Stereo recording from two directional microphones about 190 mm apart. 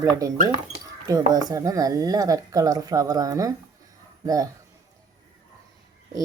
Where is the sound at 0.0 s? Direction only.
15° right (ahead or behind).